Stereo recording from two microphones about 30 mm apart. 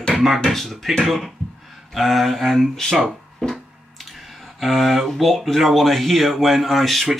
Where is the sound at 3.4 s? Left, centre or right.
Left.